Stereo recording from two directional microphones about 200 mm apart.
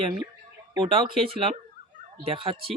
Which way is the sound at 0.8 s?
25° right (ahead or behind).